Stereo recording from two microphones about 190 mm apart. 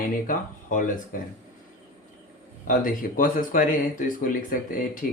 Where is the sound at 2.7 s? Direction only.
45° left (ahead or behind).